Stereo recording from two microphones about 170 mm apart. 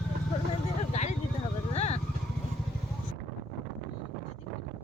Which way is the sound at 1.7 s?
40° left (ahead or behind).